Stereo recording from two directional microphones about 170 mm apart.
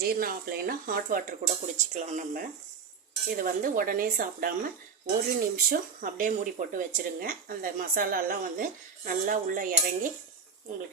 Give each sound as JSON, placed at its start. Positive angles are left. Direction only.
{"t": 0.0, "sound": "speech", "side_deg": -60}